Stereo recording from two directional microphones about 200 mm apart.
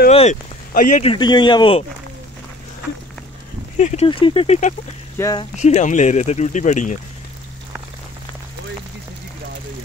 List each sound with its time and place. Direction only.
0.1 s a sound: 30° left (ahead or behind)
0.7 s speech: 40° left (ahead or behind)
1.1 s speech: 20° left (ahead or behind)
3.7 s speech: 35° left (ahead or behind)
5.1 s speech: 15° left (ahead or behind)
5.4 s speech: 35° left (ahead or behind)